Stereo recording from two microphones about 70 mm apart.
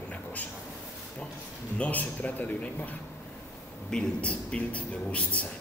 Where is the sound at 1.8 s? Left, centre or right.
Left.